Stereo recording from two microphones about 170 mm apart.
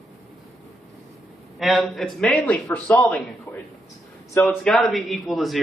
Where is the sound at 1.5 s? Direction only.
Centre (ahead or behind).